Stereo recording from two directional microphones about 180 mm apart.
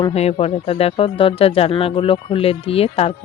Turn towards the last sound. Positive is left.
turn(degrees=35)  # may be behind; listen again after turning